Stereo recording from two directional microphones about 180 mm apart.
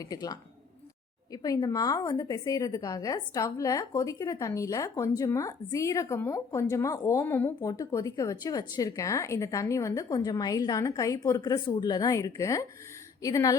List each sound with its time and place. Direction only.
0.0 s a woman's voice: 20° left (ahead or behind)